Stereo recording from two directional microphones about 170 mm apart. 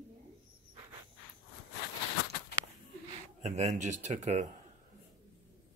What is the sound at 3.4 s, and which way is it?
Speech, 40° right (ahead or behind).